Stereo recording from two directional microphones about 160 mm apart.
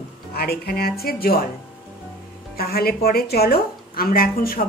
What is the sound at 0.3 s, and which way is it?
A woman's voice, 75° left (ahead or behind).